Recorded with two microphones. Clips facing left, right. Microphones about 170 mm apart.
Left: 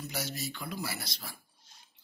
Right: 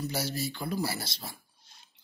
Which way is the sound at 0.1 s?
30° right (ahead or behind).